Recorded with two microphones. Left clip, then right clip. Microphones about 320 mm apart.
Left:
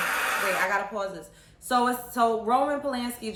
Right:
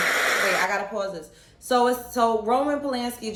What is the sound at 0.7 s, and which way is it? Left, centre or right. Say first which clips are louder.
A woman's voice: right 1 dB; centre.